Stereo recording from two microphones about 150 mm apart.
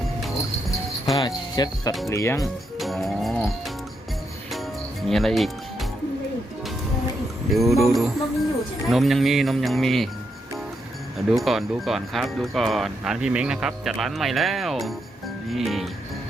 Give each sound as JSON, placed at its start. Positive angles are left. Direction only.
{"t": 1.1, "sound": "jingle bell", "side_deg": 25}
{"t": 2.0, "sound": "speech", "side_deg": 20}
{"t": 2.4, "sound": "speech", "side_deg": 0}
{"t": 5.0, "sound": "speech", "side_deg": 0}
{"t": 7.5, "sound": "speech", "side_deg": 0}
{"t": 11.3, "sound": "speech", "side_deg": 0}